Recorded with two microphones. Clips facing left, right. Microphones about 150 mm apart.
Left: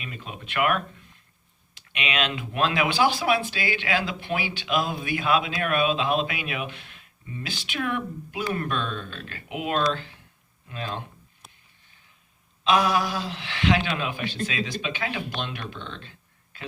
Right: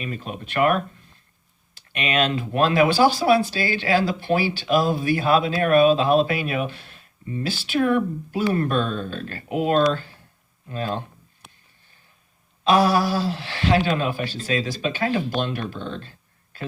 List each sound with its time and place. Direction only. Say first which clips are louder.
0.0 s speech: right 7 dB; 40° right (ahead or behind)
1.9 s speech: right 6 dB; 45° right (ahead or behind)
12.6 s speech: right 4 dB; 35° right (ahead or behind)